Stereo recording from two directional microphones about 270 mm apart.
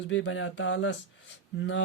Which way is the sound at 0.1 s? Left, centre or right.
Left.